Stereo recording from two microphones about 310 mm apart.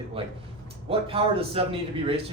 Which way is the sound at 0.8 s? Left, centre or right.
Centre.